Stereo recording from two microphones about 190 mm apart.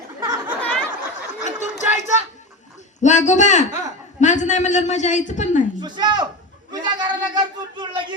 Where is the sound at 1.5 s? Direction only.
40° left (ahead or behind).